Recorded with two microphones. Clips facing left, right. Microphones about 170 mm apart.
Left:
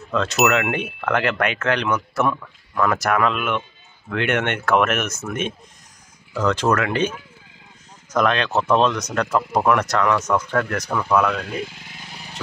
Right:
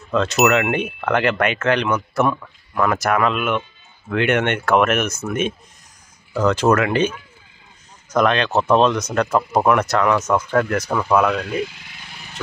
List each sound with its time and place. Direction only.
0.1 s speech: centre (ahead or behind)
2.7 s speech: 10° right (ahead or behind)
3.0 s speech: centre (ahead or behind)
8.2 s speech: centre (ahead or behind)
11.6 s vehicle: 45° left (ahead or behind)